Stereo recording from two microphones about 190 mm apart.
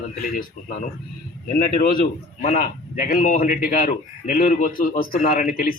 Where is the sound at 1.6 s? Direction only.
50° left (ahead or behind).